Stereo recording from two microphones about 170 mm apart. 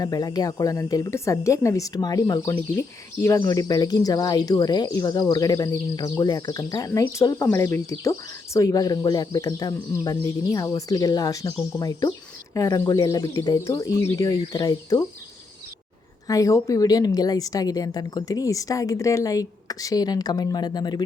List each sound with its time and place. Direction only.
0.0 s speech: 20° left (ahead or behind)
16.2 s speech: 20° left (ahead or behind)